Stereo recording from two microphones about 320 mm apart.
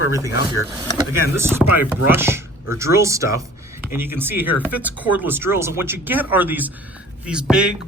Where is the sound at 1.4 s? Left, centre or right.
Centre.